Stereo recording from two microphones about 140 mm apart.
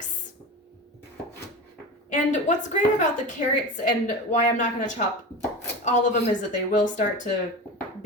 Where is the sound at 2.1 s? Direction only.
60° left (ahead or behind).